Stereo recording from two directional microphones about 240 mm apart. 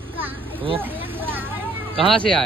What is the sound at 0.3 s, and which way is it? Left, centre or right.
Children playing, centre.